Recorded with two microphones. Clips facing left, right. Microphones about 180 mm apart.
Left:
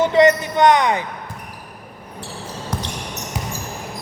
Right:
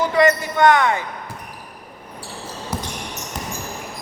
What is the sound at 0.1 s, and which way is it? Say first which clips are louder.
Speech: left 3 dB; 20° left (ahead or behind).